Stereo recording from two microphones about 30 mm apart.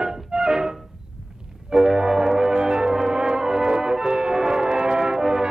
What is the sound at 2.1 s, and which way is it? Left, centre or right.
Brass instrument, centre.